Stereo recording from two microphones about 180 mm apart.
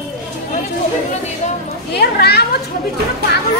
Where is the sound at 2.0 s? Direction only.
65° left (ahead or behind).